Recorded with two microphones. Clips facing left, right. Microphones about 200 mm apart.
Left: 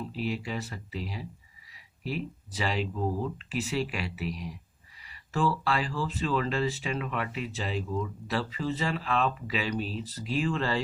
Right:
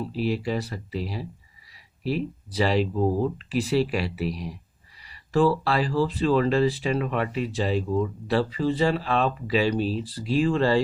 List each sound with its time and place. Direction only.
0.0 s speech: 35° right (ahead or behind)